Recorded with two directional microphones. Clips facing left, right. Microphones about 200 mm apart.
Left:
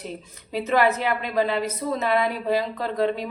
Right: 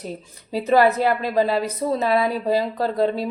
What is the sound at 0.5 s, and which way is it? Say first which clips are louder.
Speech: right 4 dB; 35° right (ahead or behind).